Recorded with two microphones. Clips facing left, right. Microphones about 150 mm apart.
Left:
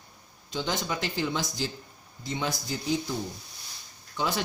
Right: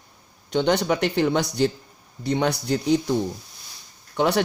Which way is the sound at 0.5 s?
65° right (ahead or behind).